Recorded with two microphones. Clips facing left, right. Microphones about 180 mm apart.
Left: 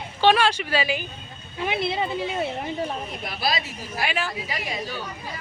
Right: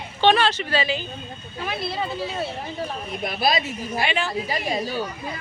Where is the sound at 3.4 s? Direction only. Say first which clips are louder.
Right 4 dB; 20° right (ahead or behind).